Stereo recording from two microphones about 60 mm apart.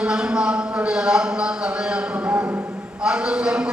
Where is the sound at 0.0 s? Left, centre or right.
Centre.